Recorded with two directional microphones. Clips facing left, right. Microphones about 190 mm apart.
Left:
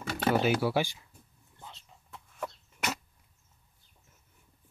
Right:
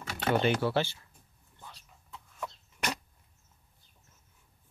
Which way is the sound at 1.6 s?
25° left (ahead or behind).